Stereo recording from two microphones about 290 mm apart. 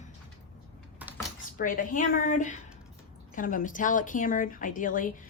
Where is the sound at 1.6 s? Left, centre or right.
Left.